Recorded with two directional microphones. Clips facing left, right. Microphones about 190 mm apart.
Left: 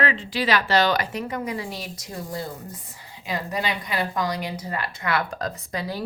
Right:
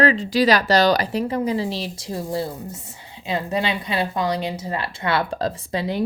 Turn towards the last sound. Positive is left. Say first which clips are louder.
# right 6 dB
turn(degrees=-25)  # may be behind; listen again after turning